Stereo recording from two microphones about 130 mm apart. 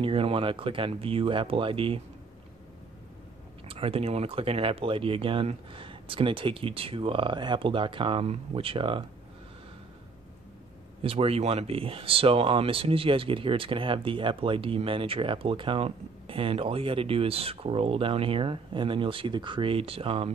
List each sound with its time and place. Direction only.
0.0 s speech: 45° right (ahead or behind)
3.6 s speech: 45° right (ahead or behind)
11.0 s speech: 45° right (ahead or behind)